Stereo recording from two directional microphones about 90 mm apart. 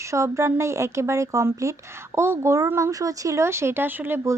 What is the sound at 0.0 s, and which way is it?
Speech, 35° right (ahead or behind).